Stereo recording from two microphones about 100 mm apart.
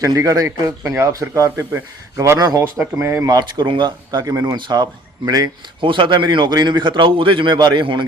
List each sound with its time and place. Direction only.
0.0 s speech: 35° right (ahead or behind)
3.6 s a man's voice: 55° right (ahead or behind)
4.2 s speech: 35° right (ahead or behind)
4.5 s a man's voice: 45° right (ahead or behind)
5.8 s a man's voice: 55° right (ahead or behind)